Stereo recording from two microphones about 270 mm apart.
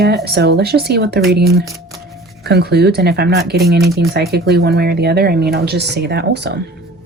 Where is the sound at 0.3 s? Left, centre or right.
Right.